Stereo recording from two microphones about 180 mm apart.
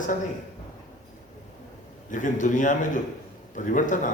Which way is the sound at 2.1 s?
45° left (ahead or behind).